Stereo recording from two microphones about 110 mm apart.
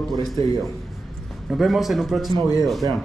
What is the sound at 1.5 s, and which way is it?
Speech, centre (ahead or behind).